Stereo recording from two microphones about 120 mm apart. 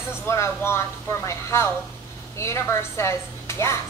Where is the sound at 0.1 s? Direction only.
20° left (ahead or behind).